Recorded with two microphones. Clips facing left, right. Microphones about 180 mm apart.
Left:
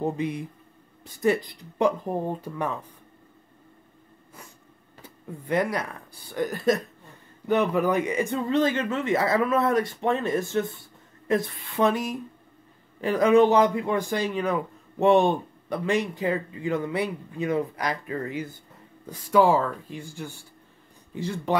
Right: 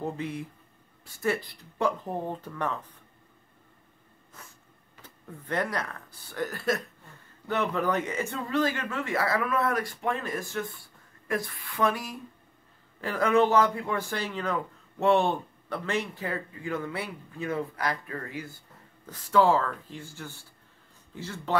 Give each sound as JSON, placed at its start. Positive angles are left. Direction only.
{"t": 0.0, "sound": "speech", "side_deg": 15}
{"t": 5.0, "sound": "a man's voice", "side_deg": 10}